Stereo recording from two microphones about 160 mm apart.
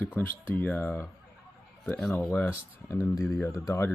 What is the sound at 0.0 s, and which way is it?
Speech, 10° left (ahead or behind).